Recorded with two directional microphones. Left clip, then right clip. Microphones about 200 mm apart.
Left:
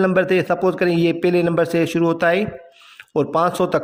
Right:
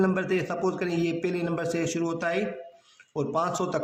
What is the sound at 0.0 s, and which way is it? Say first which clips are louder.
A man's voice: left 9 dB; 35° left (ahead or behind).